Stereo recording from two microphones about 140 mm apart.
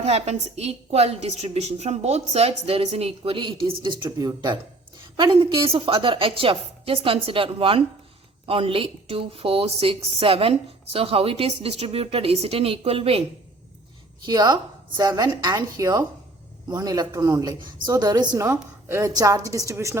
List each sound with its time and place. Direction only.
0.0 s a woman's voice: 50° right (ahead or behind)
14.3 s speech: 30° right (ahead or behind)
18.4 s speech: 15° right (ahead or behind)